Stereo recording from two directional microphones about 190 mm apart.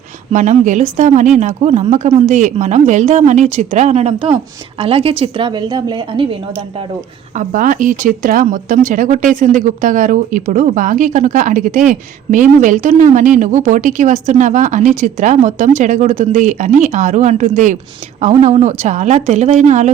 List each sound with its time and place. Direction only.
0.3 s a woman's voice: 40° right (ahead or behind); by 6.2 s 25° right (ahead or behind)
7.3 s a woman's voice: 45° right (ahead or behind)